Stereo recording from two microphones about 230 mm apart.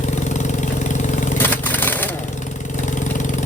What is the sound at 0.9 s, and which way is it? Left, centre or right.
Engine, left.